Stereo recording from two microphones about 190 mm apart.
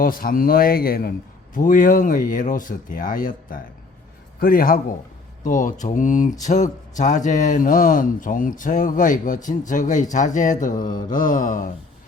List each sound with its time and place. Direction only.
0.0 s speech: 50° left (ahead or behind)